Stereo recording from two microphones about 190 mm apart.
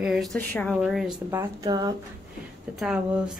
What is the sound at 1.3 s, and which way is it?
Speech, 20° right (ahead or behind).